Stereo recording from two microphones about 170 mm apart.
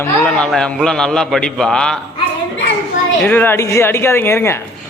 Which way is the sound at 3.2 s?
10° left (ahead or behind).